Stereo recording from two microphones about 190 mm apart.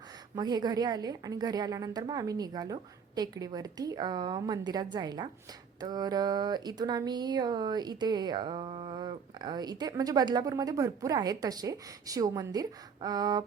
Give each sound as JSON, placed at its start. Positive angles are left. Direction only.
{"t": 0.3, "sound": "speech", "side_deg": -20}